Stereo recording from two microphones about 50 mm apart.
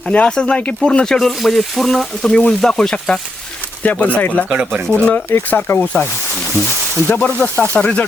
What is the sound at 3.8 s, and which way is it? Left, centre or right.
Speech, left.